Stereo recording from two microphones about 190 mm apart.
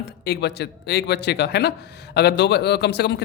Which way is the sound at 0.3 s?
60° left (ahead or behind).